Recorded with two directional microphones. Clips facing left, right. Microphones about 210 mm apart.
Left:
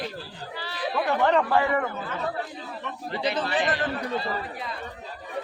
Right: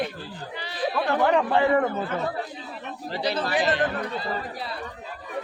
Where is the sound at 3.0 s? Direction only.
35° right (ahead or behind).